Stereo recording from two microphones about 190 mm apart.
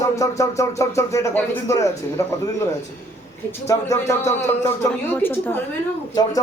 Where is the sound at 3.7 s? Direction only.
15° left (ahead or behind).